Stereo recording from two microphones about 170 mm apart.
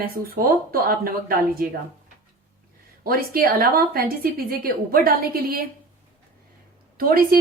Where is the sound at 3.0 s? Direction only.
60° right (ahead or behind).